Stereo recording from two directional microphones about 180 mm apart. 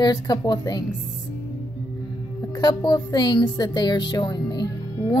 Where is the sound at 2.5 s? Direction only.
20° left (ahead or behind).